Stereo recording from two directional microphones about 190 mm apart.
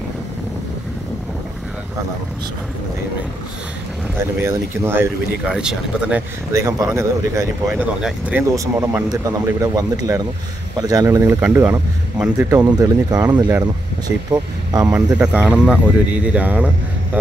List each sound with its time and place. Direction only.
4.4 s speech: 10° right (ahead or behind)
12.5 s speech: 20° right (ahead or behind)
15.1 s speech: 5° right (ahead or behind)